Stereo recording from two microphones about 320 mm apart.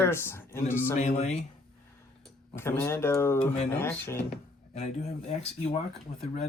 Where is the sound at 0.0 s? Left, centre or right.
Centre.